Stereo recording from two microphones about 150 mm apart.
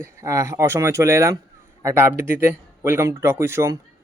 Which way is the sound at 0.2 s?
20° right (ahead or behind).